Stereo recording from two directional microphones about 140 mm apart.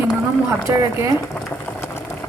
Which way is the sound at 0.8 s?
25° right (ahead or behind).